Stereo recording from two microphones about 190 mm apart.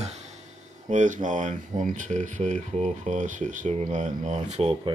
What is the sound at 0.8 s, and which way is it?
Speech, 40° right (ahead or behind).